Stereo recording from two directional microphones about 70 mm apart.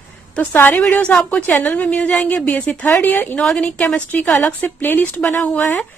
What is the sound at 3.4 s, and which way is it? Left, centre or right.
Speech, centre.